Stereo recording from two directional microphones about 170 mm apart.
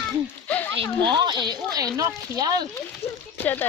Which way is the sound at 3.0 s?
15° left (ahead or behind).